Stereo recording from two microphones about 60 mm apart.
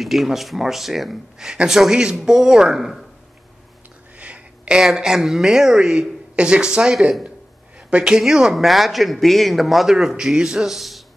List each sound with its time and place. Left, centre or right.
0.0 s a woman's voice: centre
4.2 s a sound: right
4.7 s a woman's voice: centre